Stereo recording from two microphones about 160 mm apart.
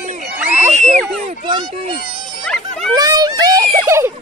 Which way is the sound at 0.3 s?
10° right (ahead or behind).